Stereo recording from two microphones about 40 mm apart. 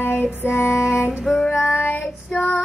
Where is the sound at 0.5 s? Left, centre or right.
Left.